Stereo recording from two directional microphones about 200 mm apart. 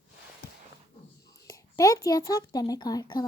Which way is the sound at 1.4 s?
15° left (ahead or behind).